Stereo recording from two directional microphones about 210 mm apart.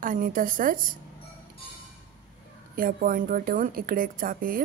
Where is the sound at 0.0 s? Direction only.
40° right (ahead or behind).